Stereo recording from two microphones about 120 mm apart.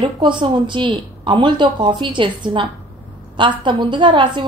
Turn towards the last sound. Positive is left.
turn(degrees=-40)  # may be behind; listen again after turning